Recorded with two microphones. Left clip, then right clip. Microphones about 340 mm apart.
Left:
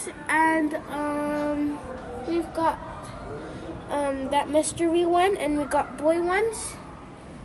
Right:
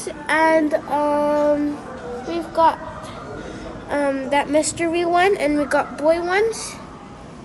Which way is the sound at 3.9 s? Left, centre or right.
Right.